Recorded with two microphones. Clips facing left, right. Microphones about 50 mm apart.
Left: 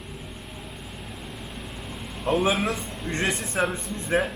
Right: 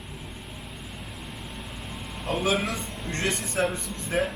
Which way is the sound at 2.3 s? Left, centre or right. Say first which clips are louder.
Left 3 dB; left.